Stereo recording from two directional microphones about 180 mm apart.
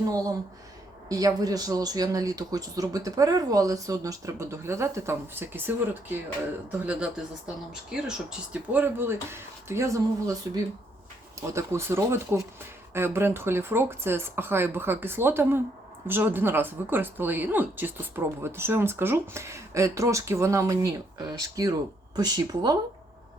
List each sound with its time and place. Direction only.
1.0 s speech: 20° right (ahead or behind)